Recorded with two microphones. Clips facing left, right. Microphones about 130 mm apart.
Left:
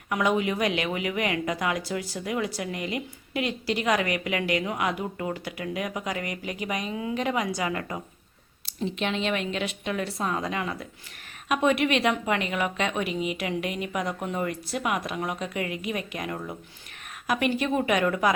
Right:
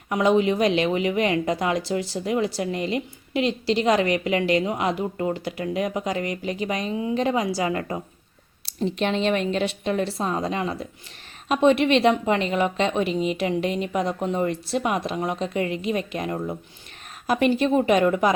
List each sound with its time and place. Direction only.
0.1 s a woman's voice: 25° right (ahead or behind)